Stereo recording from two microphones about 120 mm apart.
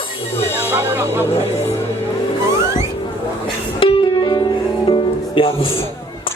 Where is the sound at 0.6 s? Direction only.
15° right (ahead or behind).